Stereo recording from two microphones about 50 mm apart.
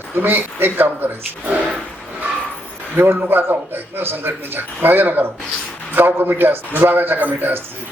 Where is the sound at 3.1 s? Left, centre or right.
Right.